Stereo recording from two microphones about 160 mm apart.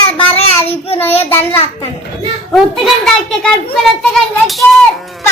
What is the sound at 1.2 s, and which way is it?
Speech, 10° left (ahead or behind).